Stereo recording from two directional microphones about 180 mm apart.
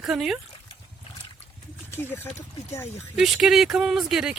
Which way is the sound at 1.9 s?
10° left (ahead or behind).